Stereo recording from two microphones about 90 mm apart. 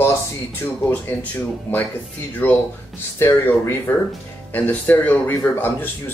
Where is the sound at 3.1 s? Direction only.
30° left (ahead or behind).